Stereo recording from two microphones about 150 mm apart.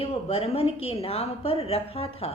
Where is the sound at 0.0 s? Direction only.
40° left (ahead or behind).